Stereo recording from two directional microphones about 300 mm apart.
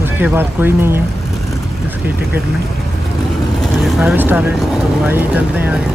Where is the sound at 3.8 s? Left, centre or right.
Centre.